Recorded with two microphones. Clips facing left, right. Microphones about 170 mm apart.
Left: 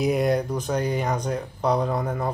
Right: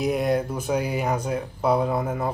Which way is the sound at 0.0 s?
Centre (ahead or behind).